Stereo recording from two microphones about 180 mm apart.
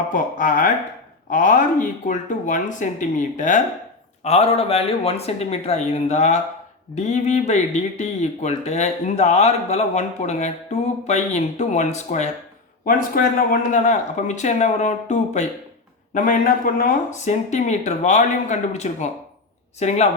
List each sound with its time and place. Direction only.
0.1 s speech: 45° left (ahead or behind)
12.8 s speech: 50° left (ahead or behind)